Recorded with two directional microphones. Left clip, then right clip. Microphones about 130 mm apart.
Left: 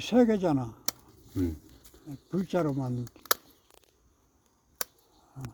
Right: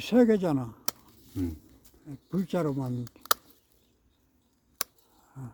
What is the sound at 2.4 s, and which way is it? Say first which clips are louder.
Speech: left 1 dB; 30° right (ahead or behind).